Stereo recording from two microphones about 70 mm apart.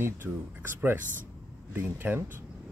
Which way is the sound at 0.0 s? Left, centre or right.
Right.